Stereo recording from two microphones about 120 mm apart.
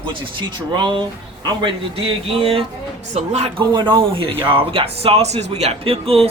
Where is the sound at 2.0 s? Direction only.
50° right (ahead or behind).